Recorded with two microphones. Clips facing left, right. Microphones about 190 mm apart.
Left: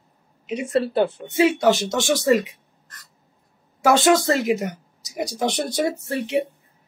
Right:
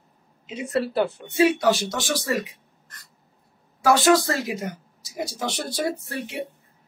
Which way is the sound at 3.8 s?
20° left (ahead or behind).